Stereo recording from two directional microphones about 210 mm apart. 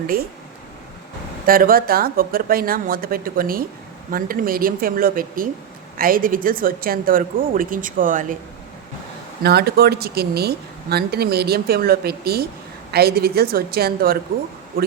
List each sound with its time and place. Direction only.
0.1 s speech: 45° right (ahead or behind)
1.5 s speech: 45° right (ahead or behind)
9.4 s speech: 50° right (ahead or behind)